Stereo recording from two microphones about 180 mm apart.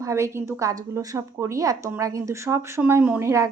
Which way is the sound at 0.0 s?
15° right (ahead or behind).